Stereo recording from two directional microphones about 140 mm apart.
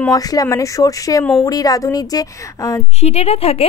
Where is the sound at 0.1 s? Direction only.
25° left (ahead or behind).